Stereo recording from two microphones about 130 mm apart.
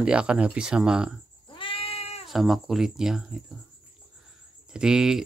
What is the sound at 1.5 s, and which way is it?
Cat, 40° left (ahead or behind).